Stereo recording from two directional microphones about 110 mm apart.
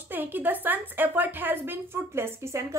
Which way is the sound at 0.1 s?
15° right (ahead or behind).